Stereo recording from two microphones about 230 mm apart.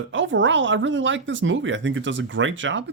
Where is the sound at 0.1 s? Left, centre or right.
Right.